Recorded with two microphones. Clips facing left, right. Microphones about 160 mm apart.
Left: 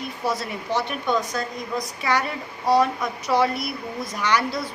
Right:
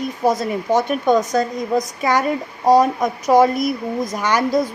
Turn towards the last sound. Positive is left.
turn(degrees=-45)  # may be behind; listen again after turning